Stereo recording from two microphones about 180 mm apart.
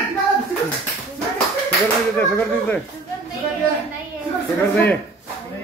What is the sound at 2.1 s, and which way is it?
Speech, 10° left (ahead or behind).